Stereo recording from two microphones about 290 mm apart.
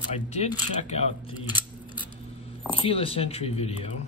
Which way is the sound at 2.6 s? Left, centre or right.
Centre.